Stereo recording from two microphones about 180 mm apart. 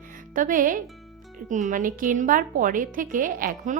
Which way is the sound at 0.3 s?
50° right (ahead or behind).